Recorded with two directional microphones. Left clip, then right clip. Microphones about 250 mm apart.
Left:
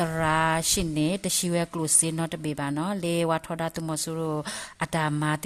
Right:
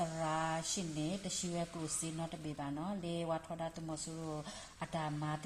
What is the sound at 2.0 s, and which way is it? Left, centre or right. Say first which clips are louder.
Speech: left 13 dB; left.